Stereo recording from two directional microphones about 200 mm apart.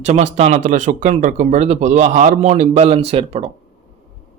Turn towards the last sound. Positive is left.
turn(degrees=-30)  # may be behind; listen again after turning